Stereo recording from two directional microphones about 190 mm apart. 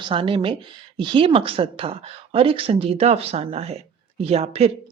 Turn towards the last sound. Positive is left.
turn(degrees=-35)  # may be behind; listen again after turning